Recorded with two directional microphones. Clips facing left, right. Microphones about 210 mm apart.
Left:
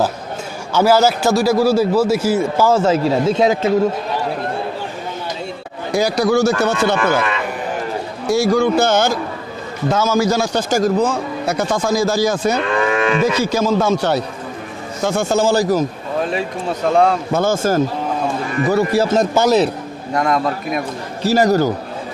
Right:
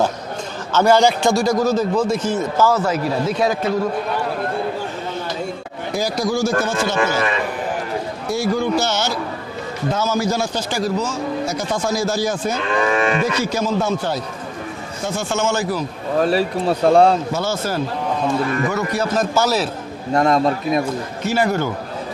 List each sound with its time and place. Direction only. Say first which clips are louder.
0.7 s a man's voice: left 1 dB; 5° left (ahead or behind)
2.7 s a man's voice: left 5 dB; 25° left (ahead or behind)
5.9 s speech: left 5 dB; 70° left (ahead or behind)
8.3 s a man's voice: left 5 dB; 85° left
8.8 s a man's voice: left 6 dB; 50° left (ahead or behind)
9.8 s a man's voice: left 4 dB; 90° left
10.7 s a man's voice: left 9 dB; 50° left (ahead or behind); by 14.2 s 75° left (ahead or behind)
15.2 s a man's voice: left 5 dB; 35° left (ahead or behind)
16.2 s speech: right 4 dB; 35° right (ahead or behind)
17.3 s a man's voice: left 6 dB; 50° left (ahead or behind)
18.7 s a man's voice: left 6 dB; 30° left (ahead or behind)
20.2 s a man's voice: right 2 dB; 25° right (ahead or behind)
21.2 s a man's voice: left 6 dB; 40° left (ahead or behind)